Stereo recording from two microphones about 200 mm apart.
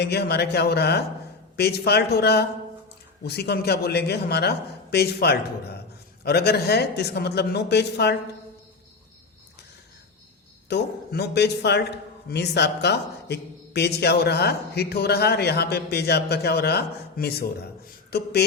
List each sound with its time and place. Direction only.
0.0 s a man's voice: 55° left (ahead or behind)
10.7 s a man's voice: 55° left (ahead or behind)